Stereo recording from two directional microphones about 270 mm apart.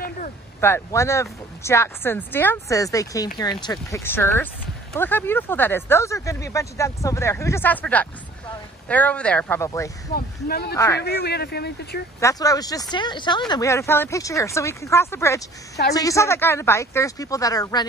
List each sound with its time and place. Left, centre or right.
0.6 s speech: centre
10.1 s speech: left
12.2 s speech: centre